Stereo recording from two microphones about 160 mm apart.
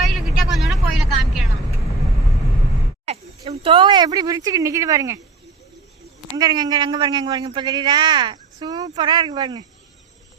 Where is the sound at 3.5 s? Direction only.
35° right (ahead or behind).